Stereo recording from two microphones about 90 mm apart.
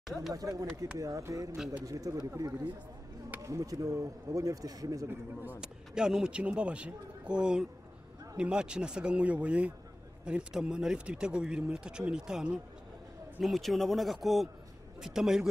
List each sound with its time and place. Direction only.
0.0 s speech: 5° right (ahead or behind)
0.3 s speech: 40° right (ahead or behind)
5.0 s speech: 20° right (ahead or behind)
5.6 s a man's voice: 5° right (ahead or behind)